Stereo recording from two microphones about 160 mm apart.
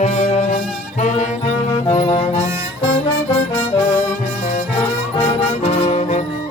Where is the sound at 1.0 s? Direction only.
50° left (ahead or behind).